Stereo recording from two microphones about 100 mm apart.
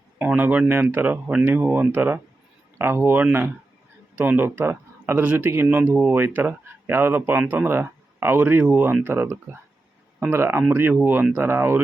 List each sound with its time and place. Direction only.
0.2 s speech: 15° right (ahead or behind)